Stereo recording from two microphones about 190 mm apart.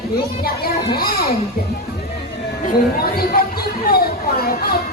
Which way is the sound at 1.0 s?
50° left (ahead or behind).